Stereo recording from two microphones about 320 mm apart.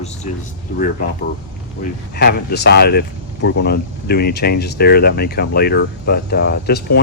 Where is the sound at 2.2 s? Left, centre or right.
Left.